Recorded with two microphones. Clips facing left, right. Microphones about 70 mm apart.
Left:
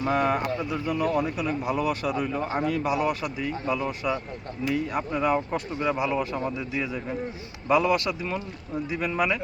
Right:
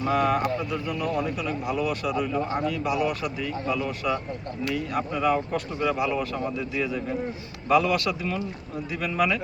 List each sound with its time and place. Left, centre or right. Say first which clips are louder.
0.1 s speech: right 2 dB; left